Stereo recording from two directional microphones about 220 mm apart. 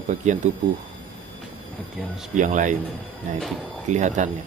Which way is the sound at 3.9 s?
35° right (ahead or behind).